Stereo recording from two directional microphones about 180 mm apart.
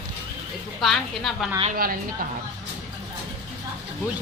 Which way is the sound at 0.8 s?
Centre (ahead or behind).